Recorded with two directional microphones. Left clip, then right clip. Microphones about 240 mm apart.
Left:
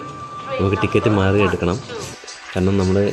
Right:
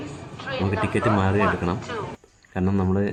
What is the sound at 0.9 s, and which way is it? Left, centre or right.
Speech, left.